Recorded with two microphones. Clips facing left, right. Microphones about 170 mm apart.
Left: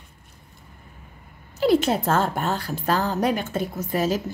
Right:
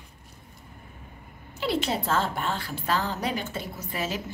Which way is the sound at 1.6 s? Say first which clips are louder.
Left 8 dB; 45° left (ahead or behind).